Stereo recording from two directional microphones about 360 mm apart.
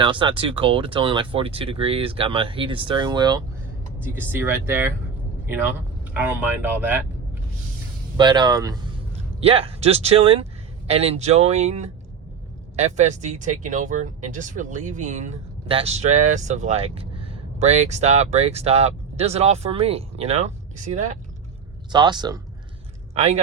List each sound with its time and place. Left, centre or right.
0.0 s speech: centre
6.1 s speech: centre
8.1 s speech: centre